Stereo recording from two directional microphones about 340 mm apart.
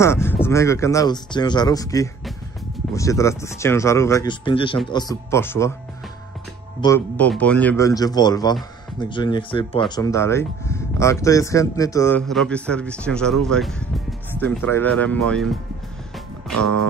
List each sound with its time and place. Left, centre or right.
0.0 s speech: centre
6.8 s speech: centre
16.5 s music: right